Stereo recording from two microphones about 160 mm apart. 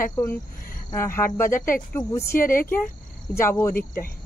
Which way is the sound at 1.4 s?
55° left (ahead or behind).